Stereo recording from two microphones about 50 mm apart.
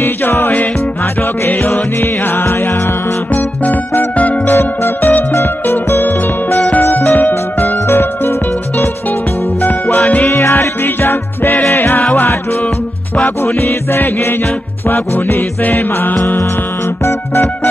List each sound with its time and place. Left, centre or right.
1.5 s music: left
3.3 s music: left
4.5 s music: left
7.9 s music: left
9.6 s music: left
10.5 s music: left
13.4 s music: left
17.0 s music: left